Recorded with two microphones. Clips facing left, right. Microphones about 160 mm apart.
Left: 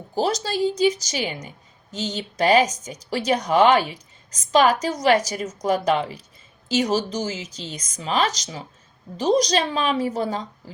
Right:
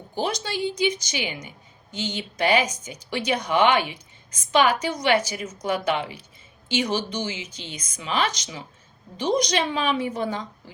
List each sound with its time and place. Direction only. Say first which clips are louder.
0.1 s a woman's voice: left 4 dB; 35° left (ahead or behind)